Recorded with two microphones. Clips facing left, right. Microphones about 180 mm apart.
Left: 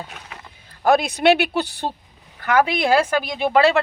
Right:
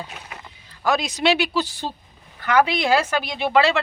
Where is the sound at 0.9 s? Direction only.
55° left (ahead or behind).